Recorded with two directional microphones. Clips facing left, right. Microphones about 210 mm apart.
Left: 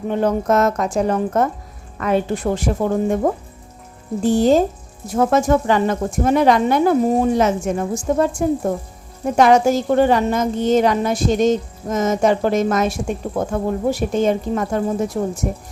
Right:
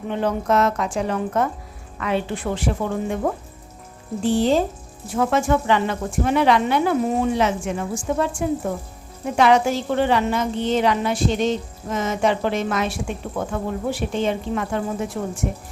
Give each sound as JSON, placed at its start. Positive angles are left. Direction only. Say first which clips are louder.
{"t": 0.1, "sound": "a woman's voice", "louder": "left 4 dB", "side_deg": 45}